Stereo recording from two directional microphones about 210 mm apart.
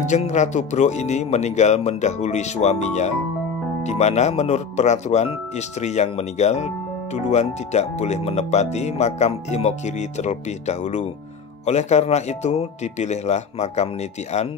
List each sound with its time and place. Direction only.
0.0 s speech: 35° left (ahead or behind)